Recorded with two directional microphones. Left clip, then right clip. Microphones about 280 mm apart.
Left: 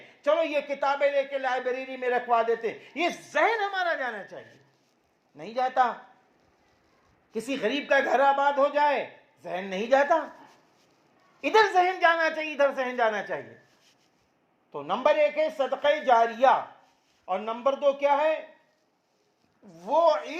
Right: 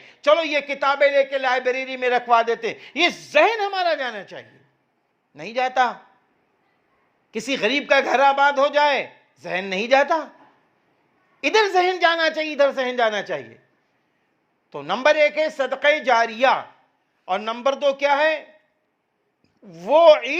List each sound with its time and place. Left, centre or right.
0.2 s a man's voice: right
7.3 s a man's voice: right
11.3 s a man's voice: right
14.7 s a man's voice: right
19.6 s a man's voice: right